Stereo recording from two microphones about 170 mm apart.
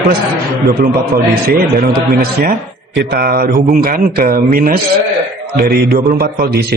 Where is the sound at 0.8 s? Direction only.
65° right (ahead or behind).